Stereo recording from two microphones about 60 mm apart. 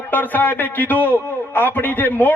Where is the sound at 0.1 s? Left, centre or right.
Left.